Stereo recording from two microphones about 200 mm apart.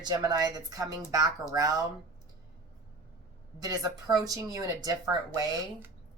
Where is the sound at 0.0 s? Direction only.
20° right (ahead or behind).